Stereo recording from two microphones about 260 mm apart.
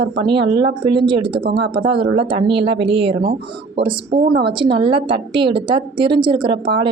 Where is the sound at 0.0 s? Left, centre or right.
Centre.